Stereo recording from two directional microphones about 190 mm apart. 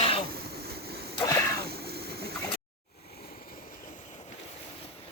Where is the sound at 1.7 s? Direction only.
55° right (ahead or behind).